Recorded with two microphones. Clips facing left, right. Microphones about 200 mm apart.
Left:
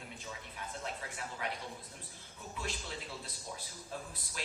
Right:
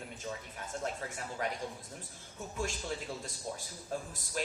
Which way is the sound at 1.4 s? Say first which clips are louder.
Right 4 dB; 45° right (ahead or behind).